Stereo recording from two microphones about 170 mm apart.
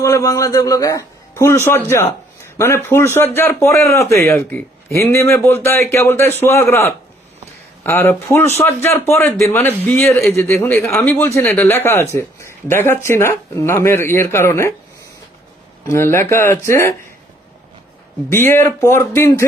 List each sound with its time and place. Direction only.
0.0 s a man's voice: 20° left (ahead or behind)
15.8 s a man's voice: 15° left (ahead or behind)
18.3 s a man's voice: 15° left (ahead or behind)